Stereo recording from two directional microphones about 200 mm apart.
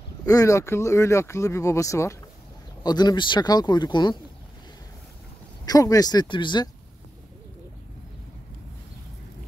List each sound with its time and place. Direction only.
0.2 s speech: 15° left (ahead or behind)
5.7 s speech: 20° left (ahead or behind)